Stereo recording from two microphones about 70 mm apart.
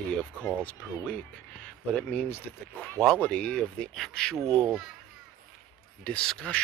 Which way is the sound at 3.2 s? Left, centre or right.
Centre.